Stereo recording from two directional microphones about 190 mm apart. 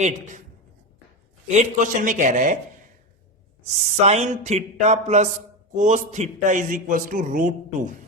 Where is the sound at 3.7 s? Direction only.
35° right (ahead or behind).